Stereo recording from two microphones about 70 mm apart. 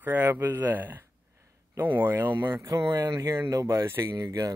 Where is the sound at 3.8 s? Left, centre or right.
Right.